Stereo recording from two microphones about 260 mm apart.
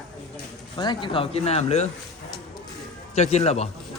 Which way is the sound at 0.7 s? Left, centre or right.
Centre.